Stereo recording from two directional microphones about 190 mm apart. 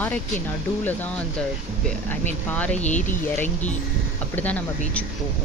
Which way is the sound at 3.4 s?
10° left (ahead or behind).